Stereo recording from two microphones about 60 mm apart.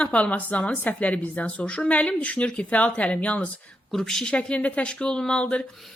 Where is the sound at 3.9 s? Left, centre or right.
Centre.